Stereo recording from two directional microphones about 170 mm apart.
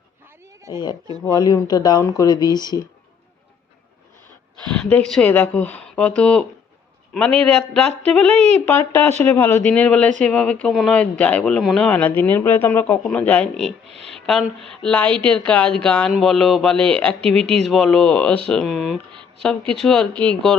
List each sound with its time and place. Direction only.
1.3 s speech: 25° left (ahead or behind)
4.7 s a man's voice: 5° left (ahead or behind)
8.3 s speech: 40° right (ahead or behind)
8.6 s speech: 15° left (ahead or behind)